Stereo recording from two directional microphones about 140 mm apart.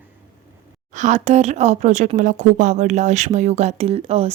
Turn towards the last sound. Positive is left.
turn(degrees=-45)  # may be behind; listen again after turning